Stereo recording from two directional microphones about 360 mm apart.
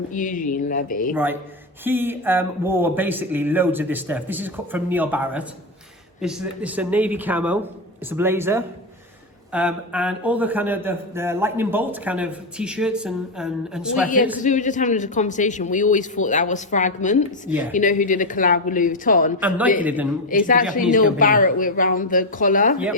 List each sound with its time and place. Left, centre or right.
0.1 s speech: left
1.1 s a man's voice: centre
14.3 s speech: left
19.4 s a man's voice: centre
20.3 s speech: left